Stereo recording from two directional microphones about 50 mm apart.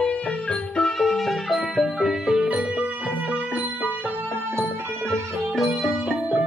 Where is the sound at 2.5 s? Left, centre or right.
Right.